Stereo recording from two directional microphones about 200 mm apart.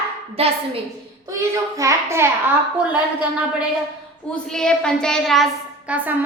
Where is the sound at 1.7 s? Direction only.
15° right (ahead or behind).